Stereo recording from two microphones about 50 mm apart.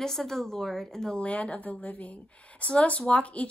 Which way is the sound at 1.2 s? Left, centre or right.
Left.